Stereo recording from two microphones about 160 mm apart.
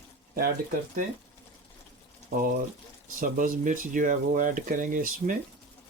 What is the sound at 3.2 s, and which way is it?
Speech, 60° right (ahead or behind).